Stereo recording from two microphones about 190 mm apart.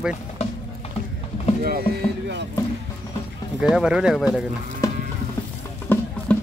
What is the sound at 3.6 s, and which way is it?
Speech, 5° right (ahead or behind).